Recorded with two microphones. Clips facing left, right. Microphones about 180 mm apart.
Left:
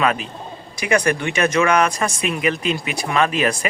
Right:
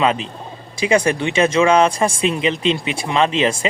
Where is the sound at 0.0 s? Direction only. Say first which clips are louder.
Right 2 dB; 25° right (ahead or behind).